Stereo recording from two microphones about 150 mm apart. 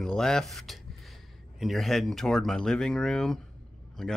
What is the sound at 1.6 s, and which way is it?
Speech, centre (ahead or behind).